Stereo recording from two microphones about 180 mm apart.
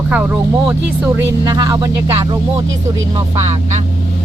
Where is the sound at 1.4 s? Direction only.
20° right (ahead or behind).